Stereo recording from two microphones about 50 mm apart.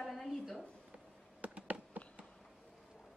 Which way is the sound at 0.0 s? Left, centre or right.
Centre.